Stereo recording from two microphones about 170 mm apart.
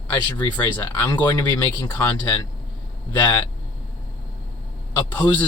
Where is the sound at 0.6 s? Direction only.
15° left (ahead or behind).